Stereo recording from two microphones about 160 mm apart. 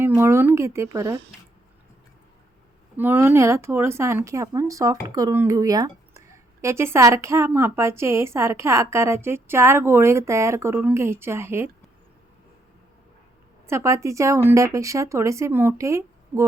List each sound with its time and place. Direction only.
0.2 s speech: 15° right (ahead or behind)
3.0 s speech: 10° right (ahead or behind)
13.7 s speech: 20° right (ahead or behind)